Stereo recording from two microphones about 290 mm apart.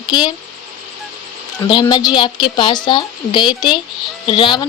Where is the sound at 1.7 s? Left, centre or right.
Centre.